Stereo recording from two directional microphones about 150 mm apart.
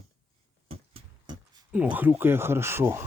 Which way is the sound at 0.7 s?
40° right (ahead or behind).